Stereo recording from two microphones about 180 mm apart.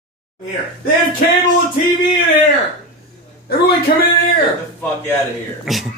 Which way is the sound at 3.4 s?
60° left (ahead or behind).